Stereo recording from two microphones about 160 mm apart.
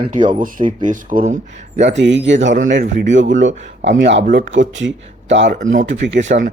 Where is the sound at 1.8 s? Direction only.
90° right.